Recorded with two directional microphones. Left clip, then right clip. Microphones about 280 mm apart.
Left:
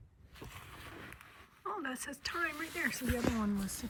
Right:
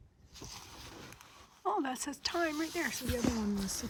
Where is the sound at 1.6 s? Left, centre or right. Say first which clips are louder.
Right 6 dB; centre.